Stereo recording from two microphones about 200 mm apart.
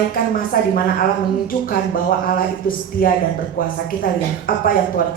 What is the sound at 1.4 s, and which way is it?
A woman's voice, 45° left (ahead or behind).